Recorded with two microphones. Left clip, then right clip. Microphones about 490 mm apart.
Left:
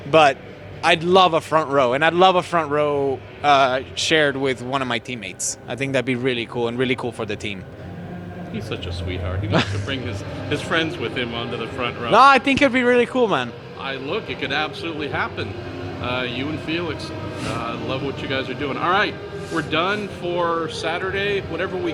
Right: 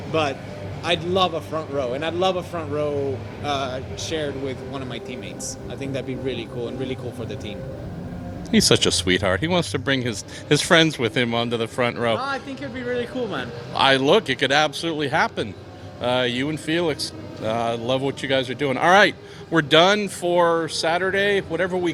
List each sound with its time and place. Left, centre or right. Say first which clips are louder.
0.1 s a man's voice: left 9 dB; left
5.8 s speech: left 7 dB; left
8.7 s speech: right 9 dB; right
12.2 s a man's voice: left 15 dB; left
13.7 s speech: right 11 dB; right